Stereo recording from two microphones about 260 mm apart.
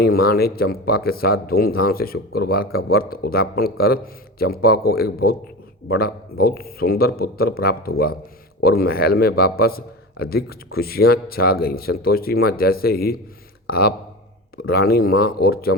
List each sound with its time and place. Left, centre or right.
0.0 s a man's voice: left